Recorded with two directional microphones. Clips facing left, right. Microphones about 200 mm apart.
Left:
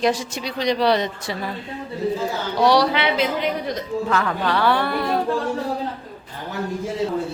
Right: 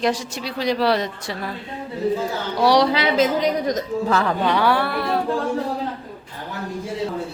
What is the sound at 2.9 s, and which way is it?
A woman's voice, 40° right (ahead or behind).